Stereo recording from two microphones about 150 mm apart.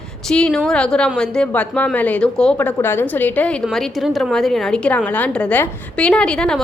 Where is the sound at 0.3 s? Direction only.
5° left (ahead or behind).